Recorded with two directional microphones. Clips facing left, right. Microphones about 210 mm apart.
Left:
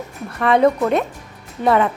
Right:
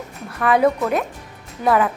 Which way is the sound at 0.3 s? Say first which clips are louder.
Left 2 dB; 5° right (ahead or behind).